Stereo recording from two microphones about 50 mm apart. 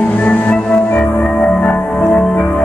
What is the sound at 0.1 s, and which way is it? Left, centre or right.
Music, left.